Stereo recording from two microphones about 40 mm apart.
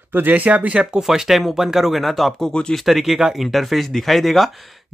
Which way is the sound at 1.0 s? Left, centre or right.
Centre.